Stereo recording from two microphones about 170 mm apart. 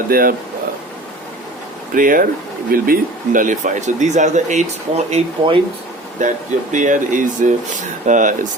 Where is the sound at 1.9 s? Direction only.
55° right (ahead or behind).